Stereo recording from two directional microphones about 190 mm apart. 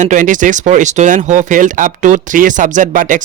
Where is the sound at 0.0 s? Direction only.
40° right (ahead or behind).